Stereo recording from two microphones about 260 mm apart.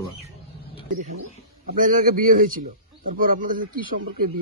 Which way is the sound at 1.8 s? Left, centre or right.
Right.